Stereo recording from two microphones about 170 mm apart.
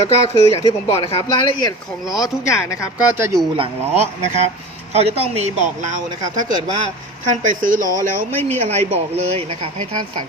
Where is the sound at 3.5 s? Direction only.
35° right (ahead or behind).